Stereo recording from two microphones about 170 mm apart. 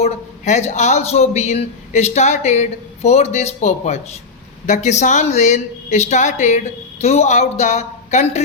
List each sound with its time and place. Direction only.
0.0 s speech: 40° left (ahead or behind)